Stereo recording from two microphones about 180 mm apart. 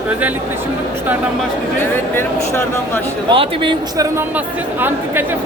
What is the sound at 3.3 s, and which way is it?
Speech, 30° right (ahead or behind).